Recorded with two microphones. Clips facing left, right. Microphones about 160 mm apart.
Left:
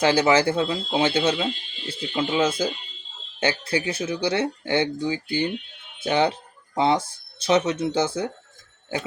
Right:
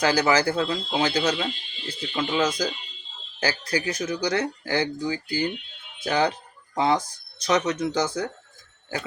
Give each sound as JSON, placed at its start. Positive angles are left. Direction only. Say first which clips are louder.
{"t": 0.0, "sound": "speech", "louder": "left 2 dB", "side_deg": 25}